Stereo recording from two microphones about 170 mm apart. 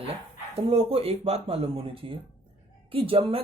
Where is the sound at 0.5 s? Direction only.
35° right (ahead or behind).